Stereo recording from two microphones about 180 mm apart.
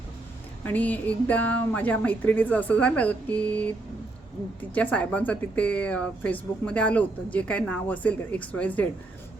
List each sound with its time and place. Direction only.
0.6 s speech: 10° left (ahead or behind)
4.7 s speech: 10° left (ahead or behind)